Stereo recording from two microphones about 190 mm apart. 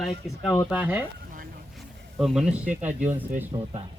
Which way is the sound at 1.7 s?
Centre (ahead or behind).